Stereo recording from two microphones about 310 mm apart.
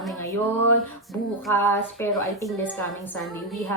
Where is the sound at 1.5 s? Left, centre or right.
Centre.